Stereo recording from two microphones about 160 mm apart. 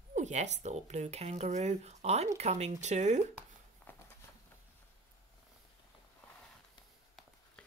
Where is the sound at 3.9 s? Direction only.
10° left (ahead or behind).